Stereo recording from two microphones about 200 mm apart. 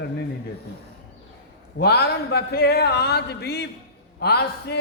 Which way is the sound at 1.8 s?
55° left (ahead or behind).